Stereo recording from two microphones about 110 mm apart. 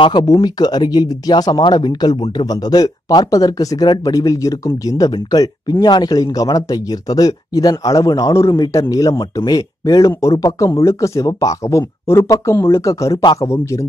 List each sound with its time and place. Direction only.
0.0 s speech: 40° left (ahead or behind)